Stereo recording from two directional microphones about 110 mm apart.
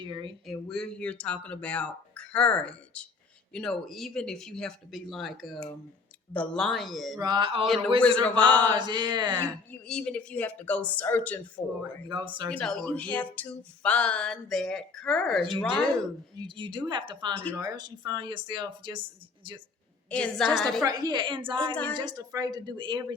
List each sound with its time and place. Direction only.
0.0 s speech: 45° right (ahead or behind)
0.4 s speech: 5° left (ahead or behind)
7.2 s speech: 40° right (ahead or behind)
7.6 s speech: centre (ahead or behind)
8.7 s speech: 45° right (ahead or behind)
9.4 s speech: 5° left (ahead or behind)
11.6 s speech: 30° left (ahead or behind)
12.0 s speech: 45° right (ahead or behind)
12.5 s speech: 5° left (ahead or behind)
16.4 s speech: 45° right (ahead or behind)
20.1 s speech: 10° left (ahead or behind)
20.8 s speech: 40° right (ahead or behind)
21.9 s speech: 35° right (ahead or behind)